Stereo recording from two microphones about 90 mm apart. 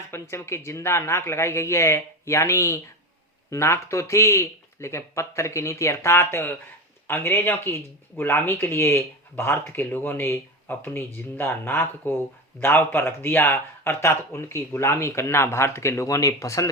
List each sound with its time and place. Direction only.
0.1 s speech: 30° left (ahead or behind)